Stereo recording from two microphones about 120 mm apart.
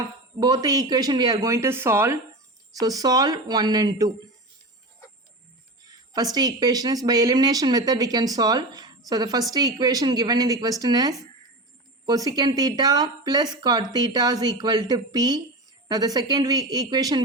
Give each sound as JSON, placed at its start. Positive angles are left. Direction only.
{"t": 0.3, "sound": "speech", "side_deg": -35}
{"t": 2.7, "sound": "speech", "side_deg": -30}
{"t": 6.3, "sound": "speech", "side_deg": -35}